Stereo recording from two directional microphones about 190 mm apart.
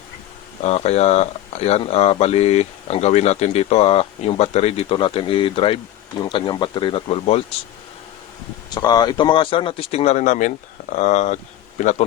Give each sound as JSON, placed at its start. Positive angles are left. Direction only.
{"t": 0.6, "sound": "speech", "side_deg": 35}
{"t": 8.7, "sound": "speech", "side_deg": 20}